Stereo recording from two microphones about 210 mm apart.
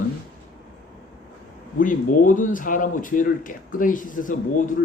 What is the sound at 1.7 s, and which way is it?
Speech, 40° left (ahead or behind).